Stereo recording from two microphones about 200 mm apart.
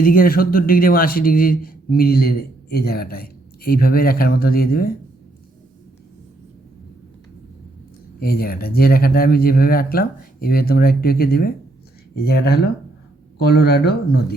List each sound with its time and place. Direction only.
0.0 s speech: 45° left (ahead or behind)
8.2 s speech: 50° left (ahead or behind)